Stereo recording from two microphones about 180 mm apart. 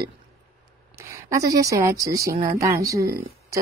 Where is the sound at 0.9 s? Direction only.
15° right (ahead or behind).